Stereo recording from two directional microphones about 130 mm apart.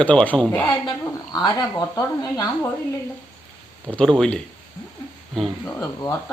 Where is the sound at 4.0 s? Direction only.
5° left (ahead or behind).